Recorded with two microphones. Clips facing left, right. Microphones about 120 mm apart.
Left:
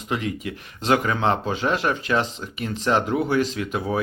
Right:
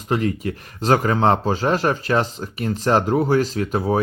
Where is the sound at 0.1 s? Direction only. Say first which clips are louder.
Right 5 dB; 40° right (ahead or behind).